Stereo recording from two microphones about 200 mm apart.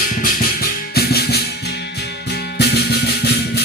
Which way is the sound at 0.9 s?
50° left (ahead or behind).